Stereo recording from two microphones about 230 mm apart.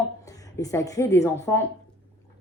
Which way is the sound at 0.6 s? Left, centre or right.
Centre.